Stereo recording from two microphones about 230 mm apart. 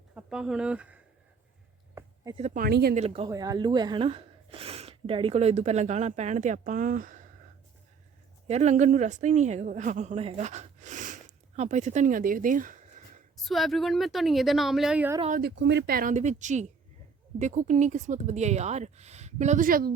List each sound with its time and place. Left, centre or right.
0.1 s speech: centre
2.3 s speech: right
2.9 s speech: right
8.4 s speech: right
13.3 s a woman's voice: centre
15.4 s speech: right